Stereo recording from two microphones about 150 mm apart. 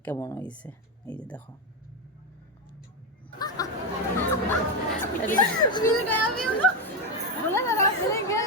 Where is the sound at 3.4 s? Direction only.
25° left (ahead or behind).